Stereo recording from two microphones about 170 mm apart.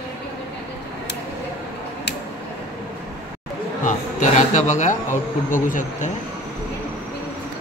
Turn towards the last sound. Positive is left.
turn(degrees=50)  # may be behind; listen again after turning